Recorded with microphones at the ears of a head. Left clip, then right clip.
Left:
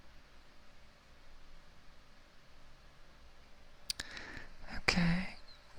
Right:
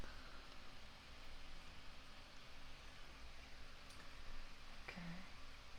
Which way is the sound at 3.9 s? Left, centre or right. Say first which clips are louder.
Left 15 dB; left.